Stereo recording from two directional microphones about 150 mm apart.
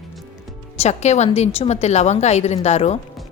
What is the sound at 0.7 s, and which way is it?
A woman's voice, 45° left (ahead or behind).